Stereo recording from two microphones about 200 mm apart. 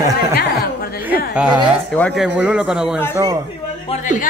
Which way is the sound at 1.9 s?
5° left (ahead or behind).